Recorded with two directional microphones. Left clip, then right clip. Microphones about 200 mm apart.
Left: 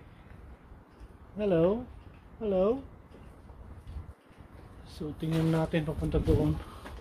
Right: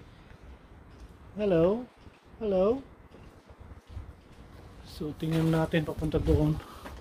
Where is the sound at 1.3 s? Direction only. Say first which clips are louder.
Right 1 dB; 5° right (ahead or behind).